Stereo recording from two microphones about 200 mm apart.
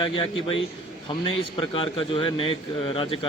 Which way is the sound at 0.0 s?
25° left (ahead or behind).